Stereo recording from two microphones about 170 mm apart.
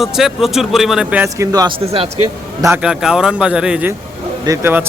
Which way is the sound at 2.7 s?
5° right (ahead or behind).